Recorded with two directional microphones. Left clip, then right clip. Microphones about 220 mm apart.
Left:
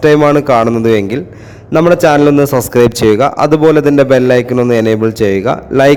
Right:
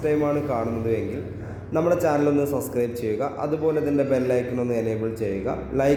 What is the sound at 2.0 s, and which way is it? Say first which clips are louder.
A man's voice: left 14 dB; 40° left (ahead or behind).